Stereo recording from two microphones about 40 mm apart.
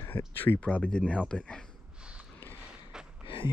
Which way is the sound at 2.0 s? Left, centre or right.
Right.